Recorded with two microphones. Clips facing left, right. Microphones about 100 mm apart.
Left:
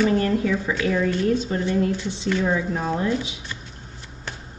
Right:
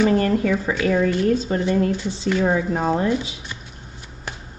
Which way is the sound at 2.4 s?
50° right (ahead or behind).